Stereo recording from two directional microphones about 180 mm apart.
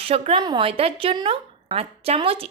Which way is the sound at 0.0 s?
30° right (ahead or behind).